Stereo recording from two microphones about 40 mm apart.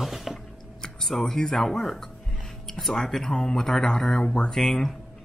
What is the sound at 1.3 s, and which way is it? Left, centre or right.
Speech, centre.